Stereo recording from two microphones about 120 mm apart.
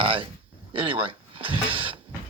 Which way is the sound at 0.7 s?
50° right (ahead or behind).